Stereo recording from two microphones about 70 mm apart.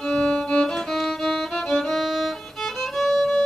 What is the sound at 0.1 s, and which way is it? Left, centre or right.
Music, centre.